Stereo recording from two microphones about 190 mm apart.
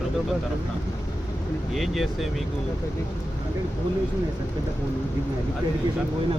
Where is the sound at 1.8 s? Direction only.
Centre (ahead or behind).